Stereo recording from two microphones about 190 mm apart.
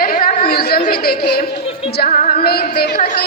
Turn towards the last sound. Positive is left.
turn(degrees=50)  # may be behind; listen again after turning